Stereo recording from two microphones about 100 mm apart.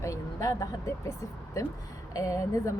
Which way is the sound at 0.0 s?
30° left (ahead or behind).